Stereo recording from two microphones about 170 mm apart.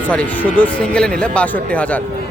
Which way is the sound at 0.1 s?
10° left (ahead or behind).